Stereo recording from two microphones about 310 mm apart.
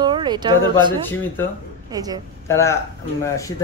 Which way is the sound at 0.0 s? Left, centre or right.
Centre.